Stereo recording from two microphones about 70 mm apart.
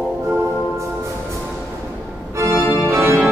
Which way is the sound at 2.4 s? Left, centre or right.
Right.